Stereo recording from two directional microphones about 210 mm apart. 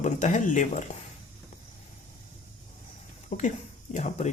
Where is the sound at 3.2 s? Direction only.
35° left (ahead or behind).